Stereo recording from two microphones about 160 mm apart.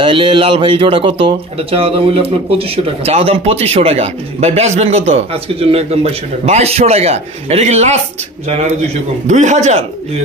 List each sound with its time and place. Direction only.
0.0 s speech: 30° right (ahead or behind)